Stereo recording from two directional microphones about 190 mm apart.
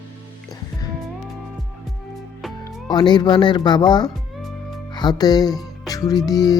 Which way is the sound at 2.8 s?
25° left (ahead or behind).